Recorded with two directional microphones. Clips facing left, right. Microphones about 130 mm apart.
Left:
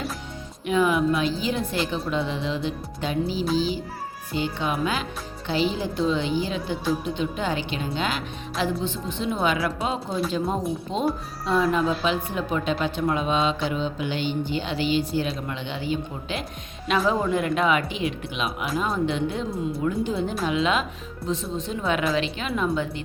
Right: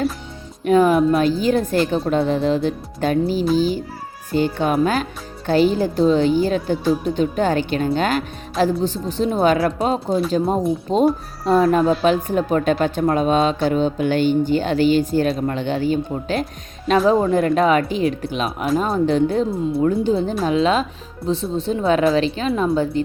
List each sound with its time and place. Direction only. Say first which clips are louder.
0.6 s a woman's voice: right 7 dB; 45° right (ahead or behind)